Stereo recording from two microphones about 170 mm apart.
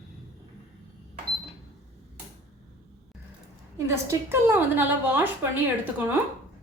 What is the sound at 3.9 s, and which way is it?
A woman's voice, 15° right (ahead or behind).